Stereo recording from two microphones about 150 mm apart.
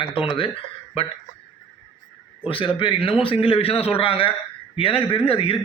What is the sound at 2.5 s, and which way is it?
A man's voice, 35° left (ahead or behind).